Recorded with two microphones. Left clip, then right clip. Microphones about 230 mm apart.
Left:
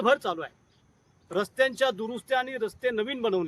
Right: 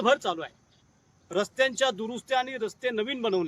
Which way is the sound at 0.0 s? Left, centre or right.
Centre.